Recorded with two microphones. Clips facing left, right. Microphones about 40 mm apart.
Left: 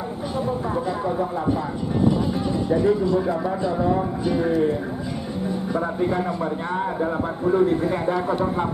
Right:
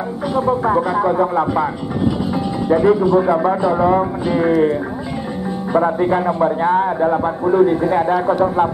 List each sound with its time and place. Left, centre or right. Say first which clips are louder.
0.3 s speech: right 10 dB; right
2.7 s speech: right 7 dB; right
5.9 s speech: right 7 dB; right